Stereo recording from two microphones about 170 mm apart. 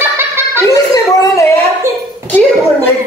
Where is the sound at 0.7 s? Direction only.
20° left (ahead or behind).